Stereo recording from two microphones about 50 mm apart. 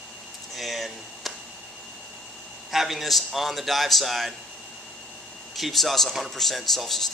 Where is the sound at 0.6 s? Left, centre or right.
Centre.